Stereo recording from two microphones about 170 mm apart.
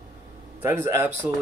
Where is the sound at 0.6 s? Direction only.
15° right (ahead or behind).